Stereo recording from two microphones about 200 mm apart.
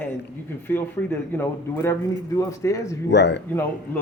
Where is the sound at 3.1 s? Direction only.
60° left (ahead or behind).